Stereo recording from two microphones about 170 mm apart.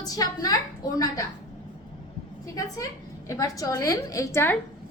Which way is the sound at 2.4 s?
20° left (ahead or behind).